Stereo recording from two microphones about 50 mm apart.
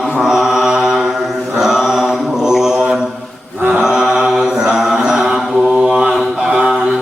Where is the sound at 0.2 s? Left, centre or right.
Centre.